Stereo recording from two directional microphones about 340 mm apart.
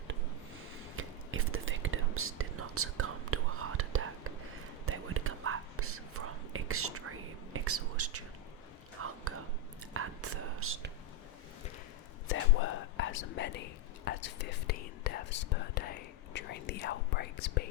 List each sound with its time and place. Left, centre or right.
0.9 s whispering: right
12.3 s whispering: left